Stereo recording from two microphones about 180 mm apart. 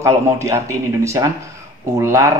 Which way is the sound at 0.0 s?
15° right (ahead or behind).